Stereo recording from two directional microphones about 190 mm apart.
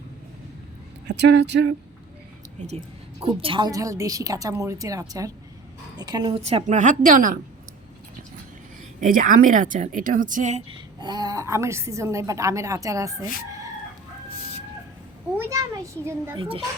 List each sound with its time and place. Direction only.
1.0 s speech: 65° right (ahead or behind)
2.6 s music: 35° right (ahead or behind)
3.2 s a woman's voice: 25° right (ahead or behind); by 7.3 s 45° right (ahead or behind)
9.0 s speech: 45° right (ahead or behind)
10.7 s a woman's voice: 20° right (ahead or behind)
15.4 s a woman's voice: 15° right (ahead or behind)
16.4 s a woman's voice: 30° right (ahead or behind)